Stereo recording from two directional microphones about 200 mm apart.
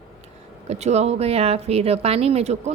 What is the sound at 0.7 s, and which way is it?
Speech, 35° right (ahead or behind).